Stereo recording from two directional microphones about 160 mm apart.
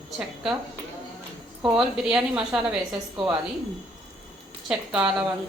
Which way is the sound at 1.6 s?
5° right (ahead or behind).